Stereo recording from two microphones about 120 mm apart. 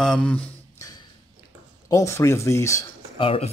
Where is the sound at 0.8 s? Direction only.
30° left (ahead or behind).